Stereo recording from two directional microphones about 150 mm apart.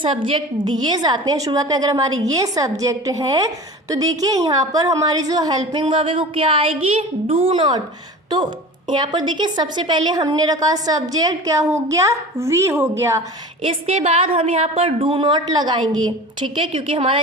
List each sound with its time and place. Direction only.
0.3 s a woman's voice: 30° right (ahead or behind)
8.9 s a woman's voice: 30° right (ahead or behind)
13.6 s a woman's voice: 40° right (ahead or behind)